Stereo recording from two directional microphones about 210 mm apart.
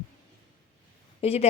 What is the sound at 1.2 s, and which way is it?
Speech, 30° left (ahead or behind).